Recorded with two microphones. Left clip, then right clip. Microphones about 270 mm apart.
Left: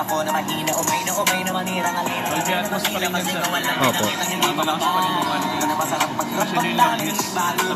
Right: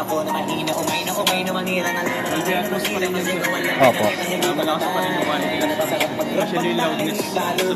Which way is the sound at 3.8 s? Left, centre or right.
Centre.